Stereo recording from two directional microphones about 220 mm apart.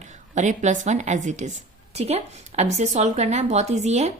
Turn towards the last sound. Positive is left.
turn(degrees=-30)  # may be behind; listen again after turning